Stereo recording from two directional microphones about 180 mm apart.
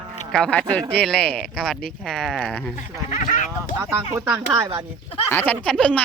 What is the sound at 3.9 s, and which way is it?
Speech, 15° right (ahead or behind).